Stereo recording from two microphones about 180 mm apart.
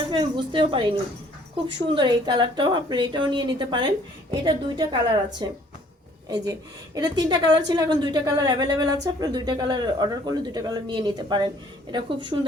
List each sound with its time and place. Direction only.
0.1 s a woman's voice: 25° right (ahead or behind)